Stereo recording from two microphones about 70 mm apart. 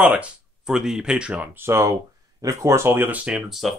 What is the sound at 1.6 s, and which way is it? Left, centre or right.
Speech, right.